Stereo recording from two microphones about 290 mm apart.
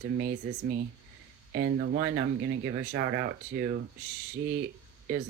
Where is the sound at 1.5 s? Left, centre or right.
Right.